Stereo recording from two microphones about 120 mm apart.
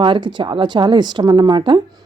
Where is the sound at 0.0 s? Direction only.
40° right (ahead or behind).